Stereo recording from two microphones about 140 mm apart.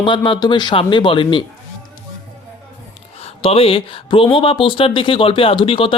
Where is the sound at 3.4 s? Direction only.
40° left (ahead or behind).